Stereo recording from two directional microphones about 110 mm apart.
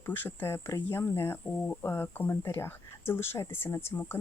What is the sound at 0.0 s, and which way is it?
Speech, 20° left (ahead or behind).